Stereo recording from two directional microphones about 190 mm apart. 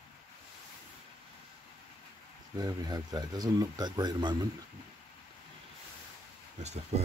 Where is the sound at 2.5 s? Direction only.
20° right (ahead or behind).